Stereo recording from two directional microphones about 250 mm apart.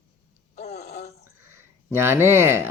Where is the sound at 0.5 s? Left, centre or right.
Left.